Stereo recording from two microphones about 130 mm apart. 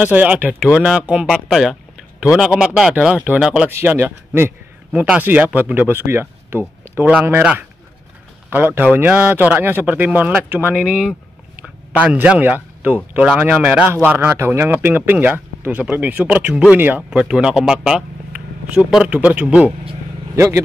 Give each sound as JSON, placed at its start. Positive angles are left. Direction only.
{"t": 0.0, "sound": "speech", "side_deg": -10}
{"t": 3.7, "sound": "speech", "side_deg": -15}
{"t": 20.3, "sound": "speech", "side_deg": -25}